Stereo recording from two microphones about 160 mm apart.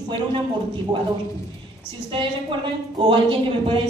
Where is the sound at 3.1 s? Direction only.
30° right (ahead or behind).